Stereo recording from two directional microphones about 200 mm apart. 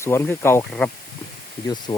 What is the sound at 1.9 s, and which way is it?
Speech, 25° left (ahead or behind).